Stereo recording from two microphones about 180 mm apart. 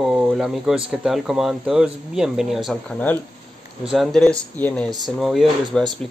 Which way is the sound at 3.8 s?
Centre (ahead or behind).